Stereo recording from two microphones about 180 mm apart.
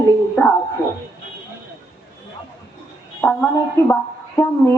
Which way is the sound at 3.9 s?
15° left (ahead or behind).